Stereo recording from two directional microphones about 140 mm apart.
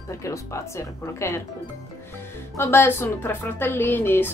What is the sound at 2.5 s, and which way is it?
Speech, 15° left (ahead or behind).